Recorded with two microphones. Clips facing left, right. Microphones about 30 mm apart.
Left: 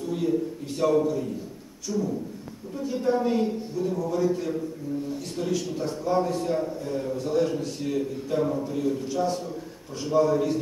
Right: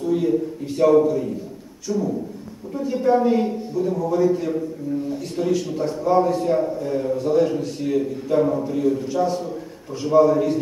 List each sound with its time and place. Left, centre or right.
0.0 s a man's voice: centre